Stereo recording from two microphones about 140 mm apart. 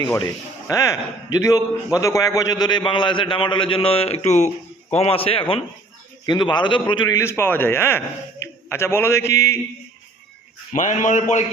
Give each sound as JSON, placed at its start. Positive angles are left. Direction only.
{"t": 0.0, "sound": "a man's voice", "side_deg": 30}
{"t": 7.2, "sound": "a man's voice", "side_deg": 20}
{"t": 10.8, "sound": "speech", "side_deg": 60}